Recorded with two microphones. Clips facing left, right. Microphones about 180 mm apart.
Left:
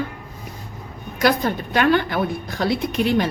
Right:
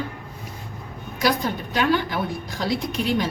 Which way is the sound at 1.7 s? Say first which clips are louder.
Left 4 dB; 60° left (ahead or behind).